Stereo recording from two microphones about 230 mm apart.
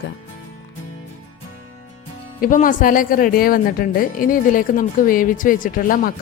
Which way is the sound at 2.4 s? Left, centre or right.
Left.